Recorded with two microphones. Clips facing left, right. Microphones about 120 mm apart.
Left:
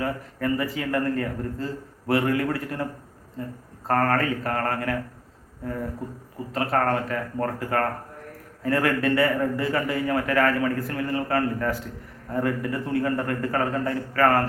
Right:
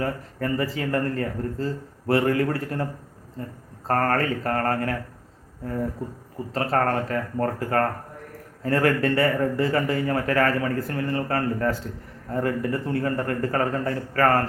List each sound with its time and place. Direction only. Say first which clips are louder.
0.0 s a man's voice: even; 35° right (ahead or behind)
3.8 s a man's voice: even; 35° right (ahead or behind)
6.5 s a man's voice: even; 35° right (ahead or behind)